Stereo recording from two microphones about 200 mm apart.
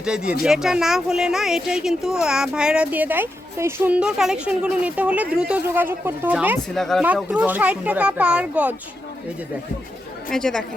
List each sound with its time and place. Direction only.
0.0 s a child's voice: 5° right (ahead or behind)
10.3 s speech: 5° left (ahead or behind)